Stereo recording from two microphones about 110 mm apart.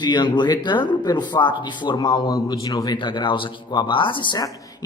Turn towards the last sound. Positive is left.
turn(degrees=45)  # may be behind; listen again after turning